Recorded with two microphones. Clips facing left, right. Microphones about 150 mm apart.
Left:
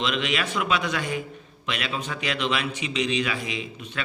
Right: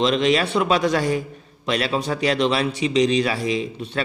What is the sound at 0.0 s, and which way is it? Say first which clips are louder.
A man's voice: right 8 dB; 35° right (ahead or behind).